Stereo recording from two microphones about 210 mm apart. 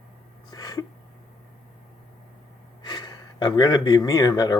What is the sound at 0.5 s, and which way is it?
Speech, 15° left (ahead or behind).